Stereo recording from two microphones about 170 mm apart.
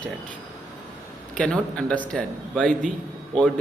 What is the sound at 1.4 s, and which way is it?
Speech, 5° left (ahead or behind).